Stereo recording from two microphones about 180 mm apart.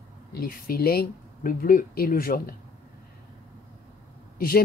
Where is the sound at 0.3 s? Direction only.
55° left (ahead or behind).